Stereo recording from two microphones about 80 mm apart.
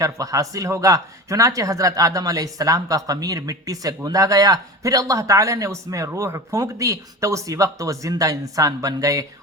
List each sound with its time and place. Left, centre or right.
0.0 s speech: right